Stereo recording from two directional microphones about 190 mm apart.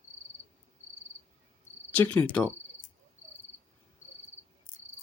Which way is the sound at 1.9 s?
10° left (ahead or behind).